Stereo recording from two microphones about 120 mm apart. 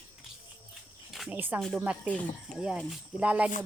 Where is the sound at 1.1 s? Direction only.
Centre (ahead or behind).